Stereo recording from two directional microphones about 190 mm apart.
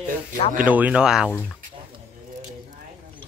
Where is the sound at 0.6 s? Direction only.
5° right (ahead or behind).